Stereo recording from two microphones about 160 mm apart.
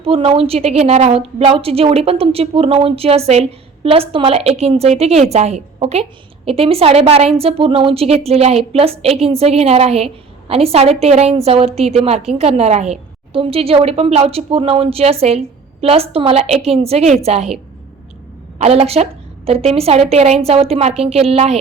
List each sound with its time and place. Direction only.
0.0 s a woman's voice: 35° right (ahead or behind)
18.6 s a woman's voice: 40° right (ahead or behind)